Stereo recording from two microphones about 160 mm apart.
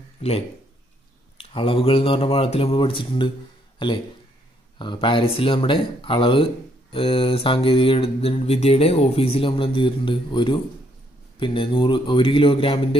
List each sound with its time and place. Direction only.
1.4 s speech: 35° left (ahead or behind)